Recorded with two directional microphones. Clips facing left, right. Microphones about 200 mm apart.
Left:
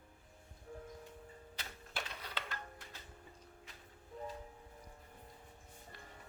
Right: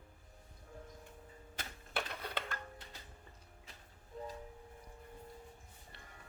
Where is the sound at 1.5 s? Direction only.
55° right (ahead or behind).